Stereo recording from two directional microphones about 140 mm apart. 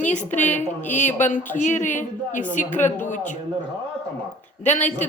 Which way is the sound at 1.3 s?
65° left (ahead or behind).